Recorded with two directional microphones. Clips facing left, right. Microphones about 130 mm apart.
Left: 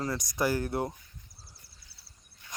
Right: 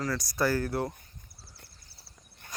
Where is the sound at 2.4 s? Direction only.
50° right (ahead or behind).